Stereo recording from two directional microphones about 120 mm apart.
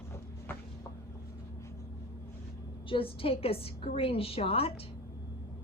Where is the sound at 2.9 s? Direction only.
50° left (ahead or behind).